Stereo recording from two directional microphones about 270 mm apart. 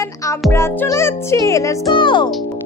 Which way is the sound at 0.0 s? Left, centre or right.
Centre.